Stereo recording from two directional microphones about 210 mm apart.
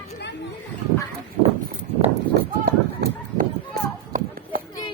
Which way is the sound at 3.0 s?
45° right (ahead or behind).